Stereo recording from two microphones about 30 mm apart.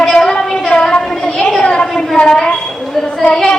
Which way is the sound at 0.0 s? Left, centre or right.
Centre.